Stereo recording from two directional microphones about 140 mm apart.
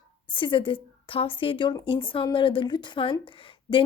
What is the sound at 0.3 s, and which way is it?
A woman's voice, 35° left (ahead or behind).